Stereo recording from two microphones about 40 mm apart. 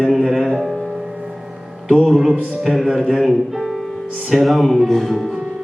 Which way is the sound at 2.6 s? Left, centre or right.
Centre.